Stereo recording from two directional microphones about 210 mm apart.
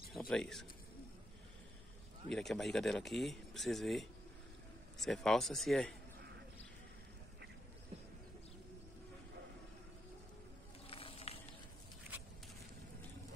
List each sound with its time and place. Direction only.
0.1 s speech: centre (ahead or behind)
2.3 s speech: centre (ahead or behind)
10.9 s a sound: 25° left (ahead or behind)